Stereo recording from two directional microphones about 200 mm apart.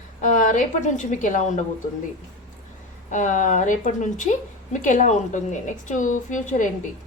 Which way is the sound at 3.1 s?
40° left (ahead or behind).